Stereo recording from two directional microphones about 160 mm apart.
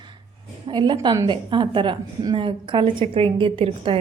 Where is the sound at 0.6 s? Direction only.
30° right (ahead or behind).